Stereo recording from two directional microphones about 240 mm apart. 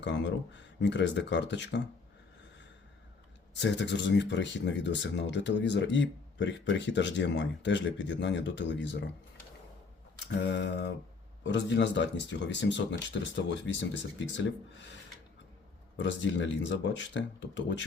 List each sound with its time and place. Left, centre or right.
0.0 s speech: left
3.5 s speech: left
10.4 s speech: left
16.0 s speech: left